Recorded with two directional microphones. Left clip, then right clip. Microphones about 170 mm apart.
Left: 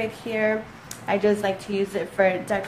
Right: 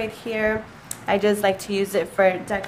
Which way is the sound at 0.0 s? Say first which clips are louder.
Even; 10° right (ahead or behind).